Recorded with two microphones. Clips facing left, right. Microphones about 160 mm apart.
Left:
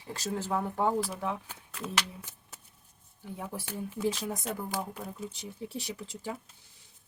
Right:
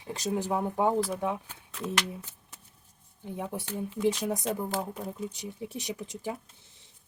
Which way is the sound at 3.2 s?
20° right (ahead or behind).